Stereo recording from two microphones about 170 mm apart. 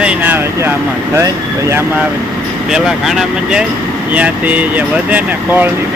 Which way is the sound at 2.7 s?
Centre (ahead or behind).